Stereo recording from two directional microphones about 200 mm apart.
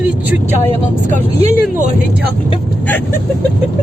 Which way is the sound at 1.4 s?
35° right (ahead or behind).